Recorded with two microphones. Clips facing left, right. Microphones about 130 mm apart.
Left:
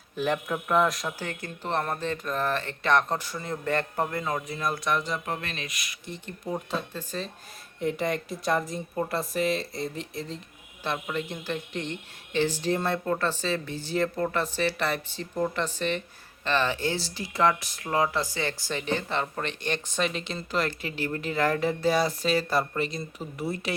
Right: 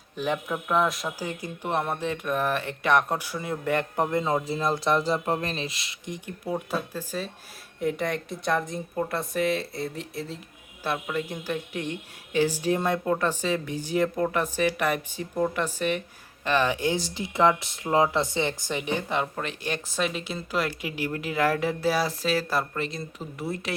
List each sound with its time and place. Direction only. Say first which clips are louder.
0.2 s a woman's voice: left 1 dB; centre (ahead or behind); by 6.0 s 25° right (ahead or behind)
6.1 s a woman's voice: right 2 dB; 10° right (ahead or behind)